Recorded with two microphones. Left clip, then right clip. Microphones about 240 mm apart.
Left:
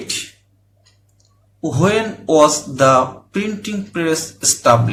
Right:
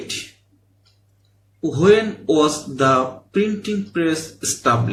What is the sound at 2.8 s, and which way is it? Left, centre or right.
Speech, left.